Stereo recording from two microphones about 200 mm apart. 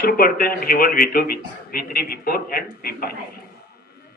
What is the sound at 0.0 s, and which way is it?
Speech, 45° left (ahead or behind).